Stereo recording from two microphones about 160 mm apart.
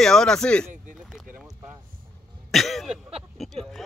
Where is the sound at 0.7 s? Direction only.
55° right (ahead or behind).